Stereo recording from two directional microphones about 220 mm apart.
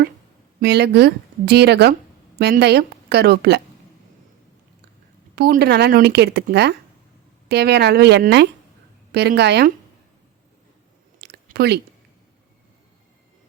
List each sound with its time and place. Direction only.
0.6 s speech: 50° right (ahead or behind)
5.3 s speech: 45° right (ahead or behind)
11.2 s a sound: 45° right (ahead or behind)